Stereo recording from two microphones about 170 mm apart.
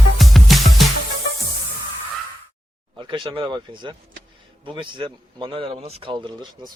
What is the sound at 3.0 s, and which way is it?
Speech, 30° right (ahead or behind).